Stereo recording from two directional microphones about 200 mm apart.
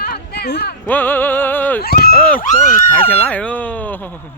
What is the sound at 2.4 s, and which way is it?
Speech, 35° left (ahead or behind).